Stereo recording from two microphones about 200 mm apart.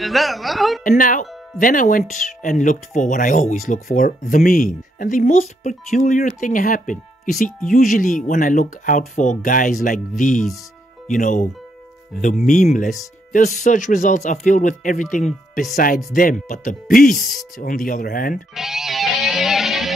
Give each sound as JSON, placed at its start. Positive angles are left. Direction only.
{"t": 0.0, "sound": "a woman's voice", "side_deg": 0}
{"t": 0.8, "sound": "speech", "side_deg": 45}
{"t": 12.4, "sound": "speech", "side_deg": 40}
{"t": 17.2, "sound": "a woman's voice", "side_deg": 0}
{"t": 17.6, "sound": "speech", "side_deg": 40}
{"t": 18.5, "sound": "music", "side_deg": 0}